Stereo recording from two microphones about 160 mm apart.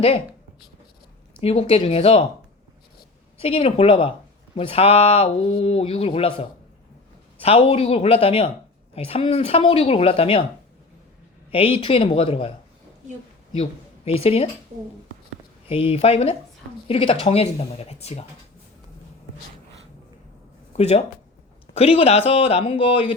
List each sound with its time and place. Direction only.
1.4 s speech: 35° left (ahead or behind)
3.3 s speech: 35° left (ahead or behind)
11.5 s speech: 35° left (ahead or behind)
13.6 s speech: 40° left (ahead or behind)
15.7 s speech: 35° left (ahead or behind)
20.7 s speech: 40° left (ahead or behind)